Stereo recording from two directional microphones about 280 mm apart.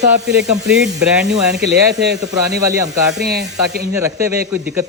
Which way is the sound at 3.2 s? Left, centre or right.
Right.